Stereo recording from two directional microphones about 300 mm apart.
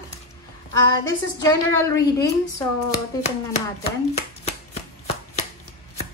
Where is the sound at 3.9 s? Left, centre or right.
Left.